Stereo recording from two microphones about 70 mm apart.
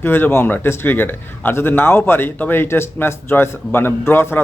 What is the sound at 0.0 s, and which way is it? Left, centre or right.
A man's voice, left.